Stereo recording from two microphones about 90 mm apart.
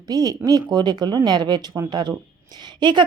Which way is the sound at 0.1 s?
45° right (ahead or behind).